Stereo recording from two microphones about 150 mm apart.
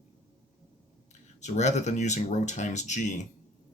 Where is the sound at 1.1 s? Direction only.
50° left (ahead or behind).